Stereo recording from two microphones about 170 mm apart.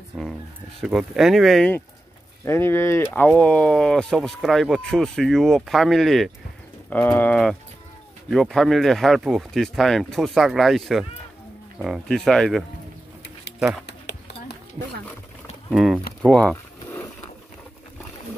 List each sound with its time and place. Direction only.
0.1 s chicken: 5° right (ahead or behind)
0.7 s speech: 5° right (ahead or behind)
2.4 s speech: 15° left (ahead or behind)
13.8 s a sound: 75° left (ahead or behind)
15.7 s speech: centre (ahead or behind)
16.9 s a sound: 15° left (ahead or behind)